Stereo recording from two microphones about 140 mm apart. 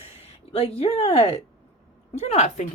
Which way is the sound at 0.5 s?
45° left (ahead or behind).